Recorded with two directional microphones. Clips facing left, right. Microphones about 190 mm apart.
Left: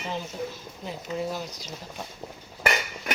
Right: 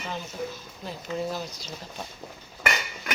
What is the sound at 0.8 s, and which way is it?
Speech, 15° left (ahead or behind).